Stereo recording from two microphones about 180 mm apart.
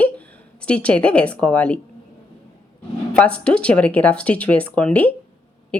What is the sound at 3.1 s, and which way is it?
A woman's voice, 5° left (ahead or behind).